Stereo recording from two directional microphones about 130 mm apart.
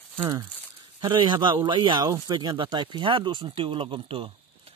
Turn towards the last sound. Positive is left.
turn(degrees=-45)  # may be behind; listen again after turning